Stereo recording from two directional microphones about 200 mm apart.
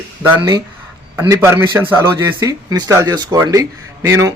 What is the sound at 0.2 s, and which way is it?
Speech, 15° right (ahead or behind).